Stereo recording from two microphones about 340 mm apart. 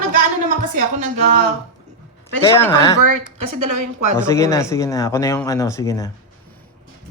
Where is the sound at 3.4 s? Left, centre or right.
Right.